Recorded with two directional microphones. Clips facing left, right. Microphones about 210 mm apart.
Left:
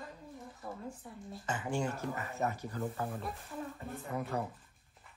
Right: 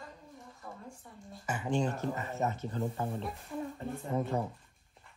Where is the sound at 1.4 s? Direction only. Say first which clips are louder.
Right 3 dB; 15° right (ahead or behind).